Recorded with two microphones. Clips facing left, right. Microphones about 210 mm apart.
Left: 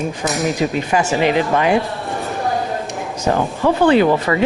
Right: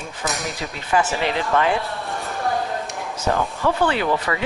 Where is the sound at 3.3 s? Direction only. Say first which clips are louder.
Left 5 dB; 20° left (ahead or behind).